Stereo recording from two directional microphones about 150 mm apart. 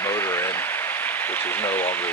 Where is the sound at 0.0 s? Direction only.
15° left (ahead or behind).